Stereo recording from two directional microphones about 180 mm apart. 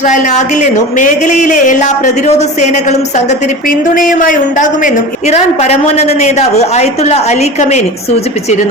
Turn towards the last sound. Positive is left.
turn(degrees=40)  # may be behind; listen again after turning